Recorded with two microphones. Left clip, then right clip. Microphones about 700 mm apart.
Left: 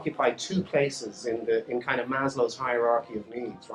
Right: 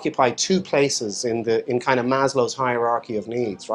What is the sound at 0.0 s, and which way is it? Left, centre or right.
Speech, right.